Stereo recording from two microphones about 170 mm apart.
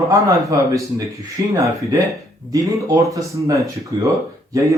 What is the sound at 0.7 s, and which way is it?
Speech, 20° right (ahead or behind).